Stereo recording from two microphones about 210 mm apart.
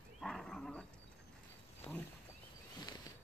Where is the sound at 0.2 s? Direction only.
Centre (ahead or behind).